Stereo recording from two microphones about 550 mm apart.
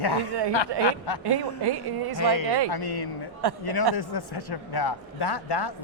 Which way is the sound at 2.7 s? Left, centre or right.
Left.